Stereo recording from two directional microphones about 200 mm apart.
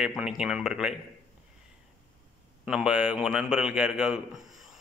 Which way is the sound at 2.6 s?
5° right (ahead or behind).